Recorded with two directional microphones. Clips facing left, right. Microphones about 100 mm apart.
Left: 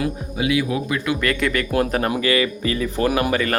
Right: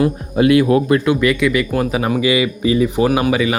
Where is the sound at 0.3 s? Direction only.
55° right (ahead or behind).